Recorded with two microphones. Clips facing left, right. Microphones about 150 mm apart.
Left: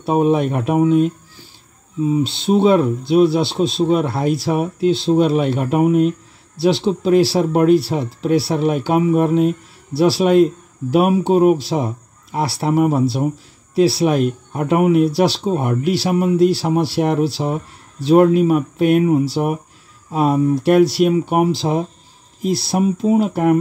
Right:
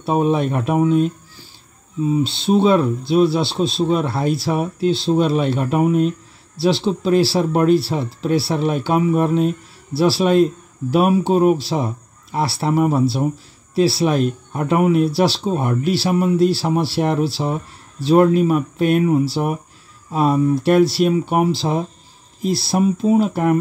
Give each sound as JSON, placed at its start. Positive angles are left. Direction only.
{"t": 0.0, "sound": "speech", "side_deg": 15}
{"t": 2.2, "sound": "speech", "side_deg": 15}